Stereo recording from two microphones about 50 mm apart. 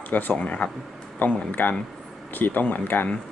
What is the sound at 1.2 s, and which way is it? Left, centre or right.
Speech, left.